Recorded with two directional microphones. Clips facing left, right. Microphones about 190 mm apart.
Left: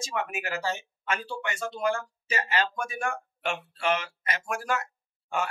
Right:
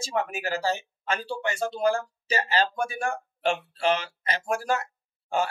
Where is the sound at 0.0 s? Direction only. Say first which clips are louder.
Right 3 dB; 35° right (ahead or behind).